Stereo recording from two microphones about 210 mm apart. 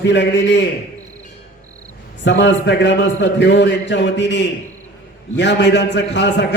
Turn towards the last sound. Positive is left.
turn(degrees=55)  # may be behind; listen again after turning